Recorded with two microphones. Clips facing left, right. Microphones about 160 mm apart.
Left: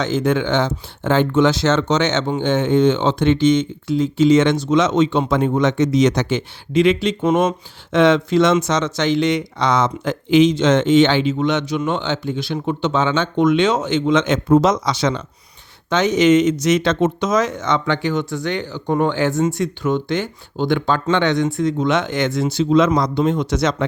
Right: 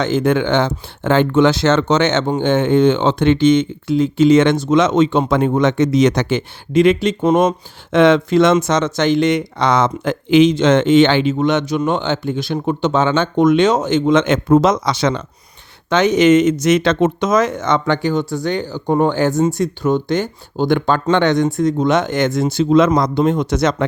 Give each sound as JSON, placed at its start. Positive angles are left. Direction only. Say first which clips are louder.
{"t": 0.0, "sound": "speech", "louder": "right 3 dB", "side_deg": -55}
{"t": 7.9, "sound": "speech", "louder": "right 3 dB", "side_deg": -55}